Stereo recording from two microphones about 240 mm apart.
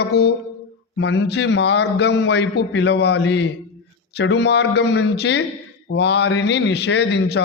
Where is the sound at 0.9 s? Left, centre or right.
Left.